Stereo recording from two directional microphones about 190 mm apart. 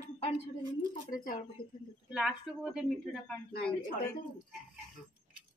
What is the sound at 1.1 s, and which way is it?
Speech, 50° left (ahead or behind).